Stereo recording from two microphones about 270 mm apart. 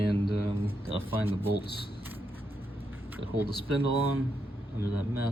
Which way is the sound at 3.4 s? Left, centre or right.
Left.